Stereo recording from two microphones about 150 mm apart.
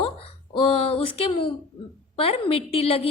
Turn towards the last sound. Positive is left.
turn(degrees=40)  # may be behind; listen again after turning